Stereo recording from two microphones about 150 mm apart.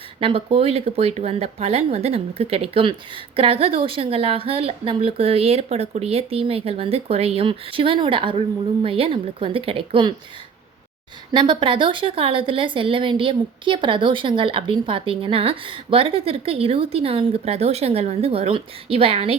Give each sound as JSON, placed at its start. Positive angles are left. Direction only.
{"t": 0.2, "sound": "speech", "side_deg": -40}
{"t": 11.3, "sound": "speech", "side_deg": -30}